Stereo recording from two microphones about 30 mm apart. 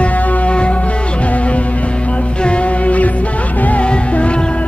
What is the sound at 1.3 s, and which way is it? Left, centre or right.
Music, left.